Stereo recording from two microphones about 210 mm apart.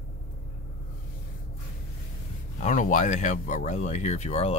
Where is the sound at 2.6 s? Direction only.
35° left (ahead or behind).